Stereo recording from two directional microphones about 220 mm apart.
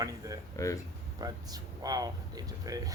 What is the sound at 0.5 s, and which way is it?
Speech, 15° left (ahead or behind).